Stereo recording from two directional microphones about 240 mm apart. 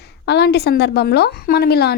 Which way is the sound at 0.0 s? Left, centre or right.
Left.